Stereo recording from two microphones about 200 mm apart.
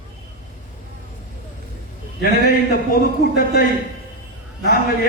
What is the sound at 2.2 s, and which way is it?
Speech, 50° left (ahead or behind).